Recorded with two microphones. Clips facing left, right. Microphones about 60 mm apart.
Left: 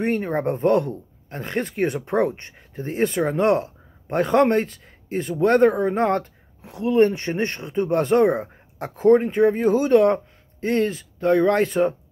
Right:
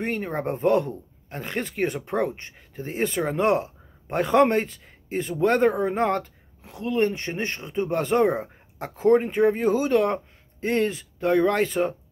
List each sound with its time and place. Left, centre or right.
0.0 s speech: centre
10.6 s speech: centre
11.2 s speech: centre